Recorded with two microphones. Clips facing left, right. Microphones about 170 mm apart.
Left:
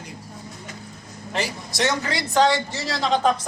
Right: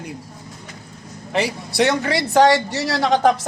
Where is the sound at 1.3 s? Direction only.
60° right (ahead or behind).